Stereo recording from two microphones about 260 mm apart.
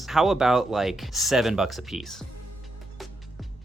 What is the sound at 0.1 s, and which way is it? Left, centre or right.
Speech, centre.